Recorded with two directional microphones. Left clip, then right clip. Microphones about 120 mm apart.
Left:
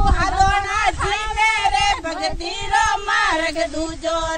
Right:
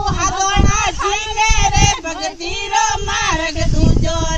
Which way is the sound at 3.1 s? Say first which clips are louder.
Even; 15° left (ahead or behind).